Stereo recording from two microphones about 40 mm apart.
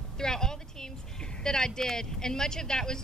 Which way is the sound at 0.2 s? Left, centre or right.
Centre.